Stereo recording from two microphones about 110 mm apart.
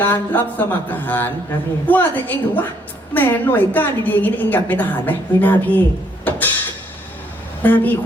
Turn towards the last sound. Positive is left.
turn(degrees=15)  # may be behind; listen again after turning